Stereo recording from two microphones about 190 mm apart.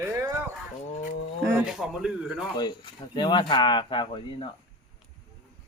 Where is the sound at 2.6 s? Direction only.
25° left (ahead or behind).